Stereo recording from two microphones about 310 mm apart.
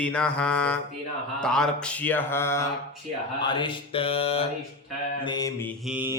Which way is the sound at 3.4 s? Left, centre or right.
Centre.